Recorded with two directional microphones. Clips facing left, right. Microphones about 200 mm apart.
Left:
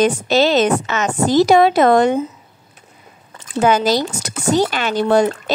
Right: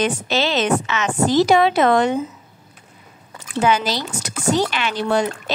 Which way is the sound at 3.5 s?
45° left (ahead or behind).